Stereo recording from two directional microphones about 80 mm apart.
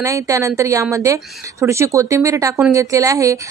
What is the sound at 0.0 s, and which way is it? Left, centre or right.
A woman's voice, right.